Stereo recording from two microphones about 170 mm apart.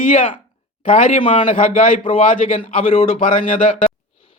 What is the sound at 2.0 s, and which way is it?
A man's voice, 30° left (ahead or behind).